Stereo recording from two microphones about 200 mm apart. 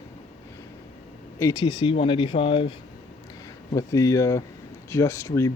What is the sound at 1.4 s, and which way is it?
Speech, 15° left (ahead or behind).